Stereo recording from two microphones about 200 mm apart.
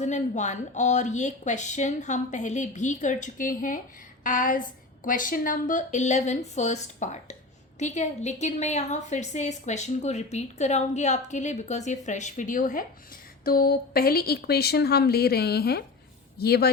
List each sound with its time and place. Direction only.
0.0 s a woman's voice: 35° left (ahead or behind); by 16.7 s 50° left (ahead or behind)